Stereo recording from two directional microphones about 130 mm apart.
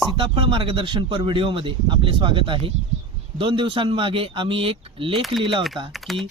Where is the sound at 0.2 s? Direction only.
40° right (ahead or behind).